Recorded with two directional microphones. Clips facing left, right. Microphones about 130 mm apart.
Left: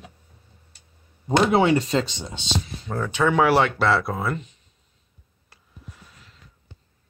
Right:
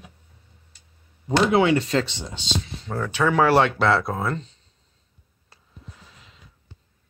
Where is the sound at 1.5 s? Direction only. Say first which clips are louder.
Right 1 dB; 30° left (ahead or behind).